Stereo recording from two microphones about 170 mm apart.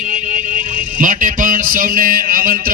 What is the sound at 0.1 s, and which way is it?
Speech, 50° right (ahead or behind).